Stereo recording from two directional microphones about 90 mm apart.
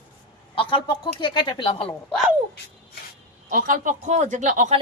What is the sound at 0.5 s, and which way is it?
A woman's voice, 65° left (ahead or behind).